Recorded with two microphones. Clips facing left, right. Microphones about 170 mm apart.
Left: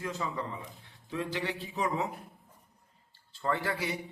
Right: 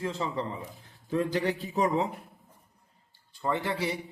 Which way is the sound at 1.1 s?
45° right (ahead or behind).